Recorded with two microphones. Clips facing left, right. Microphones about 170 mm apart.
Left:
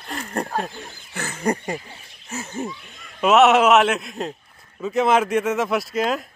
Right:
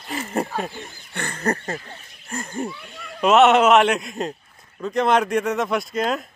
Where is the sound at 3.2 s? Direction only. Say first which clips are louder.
Even; centre (ahead or behind).